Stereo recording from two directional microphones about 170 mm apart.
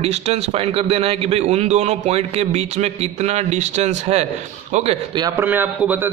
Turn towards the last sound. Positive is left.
turn(degrees=-10)  # may be behind; listen again after turning